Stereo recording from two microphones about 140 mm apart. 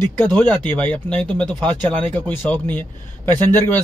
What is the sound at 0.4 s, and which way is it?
Speech, 15° left (ahead or behind).